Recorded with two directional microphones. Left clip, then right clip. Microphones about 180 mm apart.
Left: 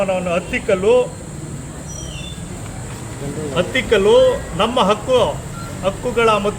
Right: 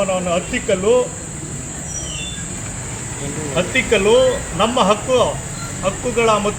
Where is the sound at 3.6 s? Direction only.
35° left (ahead or behind).